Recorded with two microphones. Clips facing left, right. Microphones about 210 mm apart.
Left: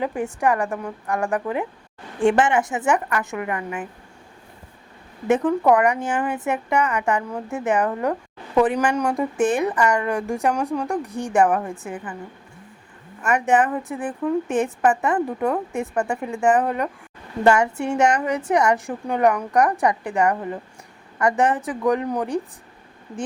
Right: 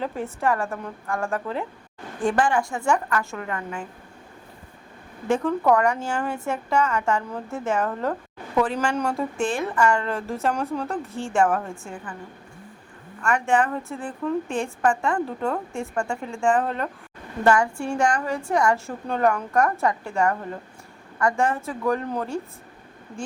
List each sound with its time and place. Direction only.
0.0 s a woman's voice: 15° left (ahead or behind)
5.3 s a woman's voice: 15° left (ahead or behind)
13.3 s a woman's voice: 20° left (ahead or behind)